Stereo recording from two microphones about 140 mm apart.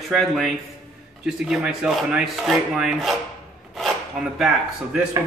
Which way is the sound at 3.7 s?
Centre (ahead or behind).